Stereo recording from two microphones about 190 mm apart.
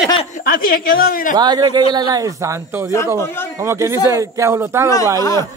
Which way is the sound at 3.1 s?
15° left (ahead or behind).